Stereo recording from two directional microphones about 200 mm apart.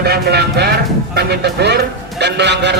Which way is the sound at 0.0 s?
55° right (ahead or behind).